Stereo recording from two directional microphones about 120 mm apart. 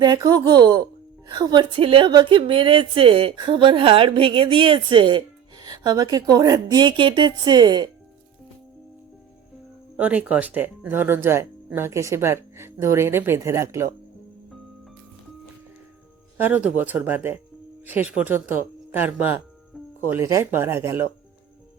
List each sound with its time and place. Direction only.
0.0 s a woman's voice: 35° right (ahead or behind)
10.0 s speech: 10° right (ahead or behind)
16.4 s speech: 15° right (ahead or behind)